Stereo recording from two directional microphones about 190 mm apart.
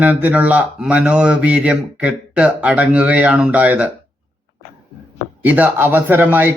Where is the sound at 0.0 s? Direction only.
10° right (ahead or behind).